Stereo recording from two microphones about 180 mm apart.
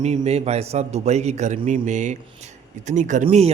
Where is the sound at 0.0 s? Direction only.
40° right (ahead or behind).